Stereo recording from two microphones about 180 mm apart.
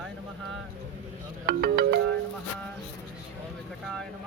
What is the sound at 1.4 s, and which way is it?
Speech, 55° right (ahead or behind).